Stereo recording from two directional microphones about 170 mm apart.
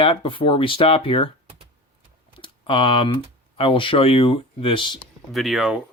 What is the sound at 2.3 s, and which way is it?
Typing, 30° left (ahead or behind).